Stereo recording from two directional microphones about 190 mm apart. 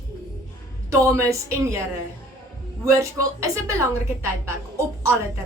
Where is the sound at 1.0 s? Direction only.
15° right (ahead or behind).